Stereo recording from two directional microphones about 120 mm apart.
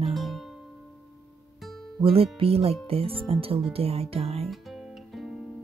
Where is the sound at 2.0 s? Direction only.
50° right (ahead or behind).